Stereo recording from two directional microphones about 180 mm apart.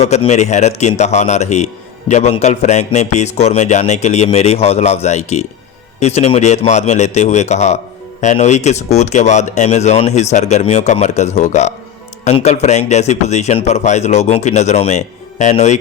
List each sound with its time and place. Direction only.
0.0 s a man's voice: 35° left (ahead or behind)